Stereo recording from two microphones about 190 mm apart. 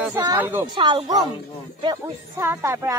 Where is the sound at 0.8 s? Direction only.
25° right (ahead or behind).